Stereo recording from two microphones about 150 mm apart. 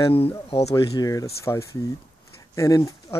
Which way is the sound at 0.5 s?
45° left (ahead or behind).